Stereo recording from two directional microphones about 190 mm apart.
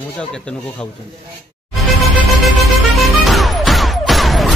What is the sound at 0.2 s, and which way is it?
Speech, 5° left (ahead or behind).